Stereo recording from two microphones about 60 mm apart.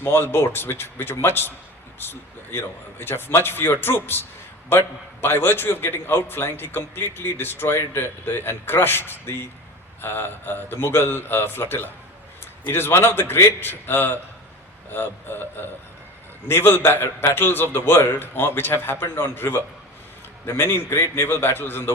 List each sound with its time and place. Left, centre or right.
0.0 s a man's voice: left